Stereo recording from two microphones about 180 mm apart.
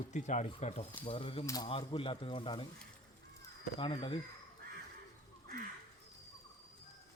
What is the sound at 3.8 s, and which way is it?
Speech, 30° left (ahead or behind).